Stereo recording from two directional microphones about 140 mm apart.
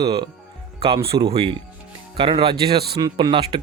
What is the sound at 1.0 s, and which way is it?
Speech, 40° right (ahead or behind).